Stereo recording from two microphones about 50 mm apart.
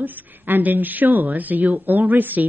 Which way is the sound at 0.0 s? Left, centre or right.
Right.